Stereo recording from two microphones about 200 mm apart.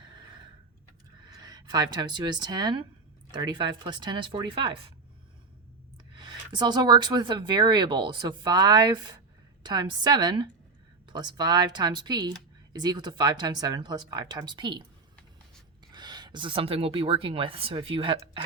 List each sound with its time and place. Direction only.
1.5 s speech: 20° right (ahead or behind)
6.1 s speech: 20° right (ahead or behind)
15.9 s speech: 20° right (ahead or behind)